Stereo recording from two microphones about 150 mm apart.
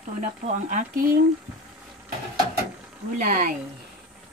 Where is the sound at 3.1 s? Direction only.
65° right (ahead or behind).